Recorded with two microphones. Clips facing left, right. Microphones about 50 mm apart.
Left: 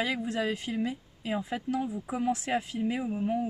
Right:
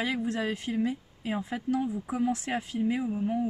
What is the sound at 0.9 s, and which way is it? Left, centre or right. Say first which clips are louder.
Speech: right 1 dB; centre.